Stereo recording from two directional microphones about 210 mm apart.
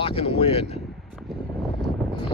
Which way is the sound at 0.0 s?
25° left (ahead or behind).